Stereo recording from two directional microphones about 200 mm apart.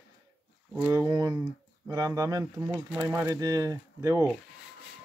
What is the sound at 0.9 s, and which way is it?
Speech, 15° right (ahead or behind).